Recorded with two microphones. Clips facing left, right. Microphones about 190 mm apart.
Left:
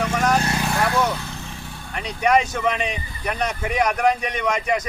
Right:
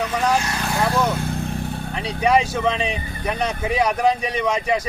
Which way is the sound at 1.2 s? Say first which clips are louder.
Right 9 dB; 55° right (ahead or behind).